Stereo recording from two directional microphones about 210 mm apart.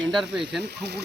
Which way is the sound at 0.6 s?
50° right (ahead or behind).